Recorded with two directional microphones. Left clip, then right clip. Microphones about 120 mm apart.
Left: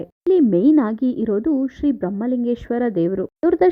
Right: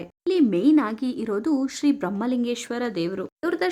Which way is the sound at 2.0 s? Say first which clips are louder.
Left 3 dB; 15° left (ahead or behind).